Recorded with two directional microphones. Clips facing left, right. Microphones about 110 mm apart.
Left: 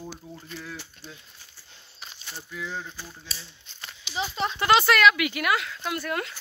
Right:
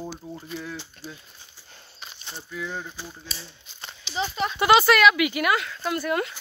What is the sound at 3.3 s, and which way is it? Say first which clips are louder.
Speech: right 2 dB; centre (ahead or behind).